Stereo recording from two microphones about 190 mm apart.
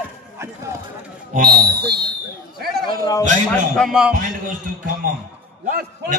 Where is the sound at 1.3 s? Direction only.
55° right (ahead or behind).